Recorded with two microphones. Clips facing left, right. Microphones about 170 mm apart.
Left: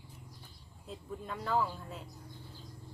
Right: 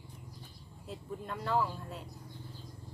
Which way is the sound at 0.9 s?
Centre (ahead or behind).